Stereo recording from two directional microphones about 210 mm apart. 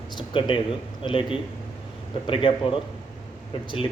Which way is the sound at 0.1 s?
20° left (ahead or behind).